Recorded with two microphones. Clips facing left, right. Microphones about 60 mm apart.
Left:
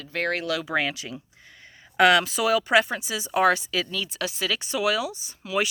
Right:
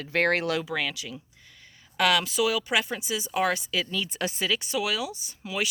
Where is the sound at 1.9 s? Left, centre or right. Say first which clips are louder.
Left 5 dB; centre.